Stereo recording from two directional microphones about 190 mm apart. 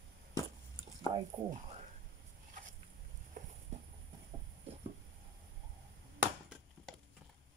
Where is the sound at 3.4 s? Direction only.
45° right (ahead or behind).